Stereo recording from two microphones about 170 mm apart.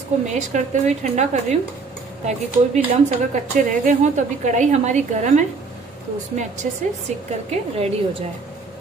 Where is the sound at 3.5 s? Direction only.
45° right (ahead or behind).